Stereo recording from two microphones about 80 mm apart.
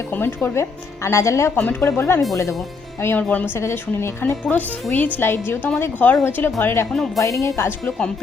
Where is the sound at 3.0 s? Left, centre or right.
Left.